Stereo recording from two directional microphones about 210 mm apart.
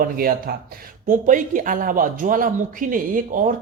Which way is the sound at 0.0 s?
45° right (ahead or behind).